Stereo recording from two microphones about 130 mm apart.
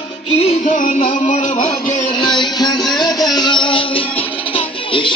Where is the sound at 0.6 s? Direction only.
80° left.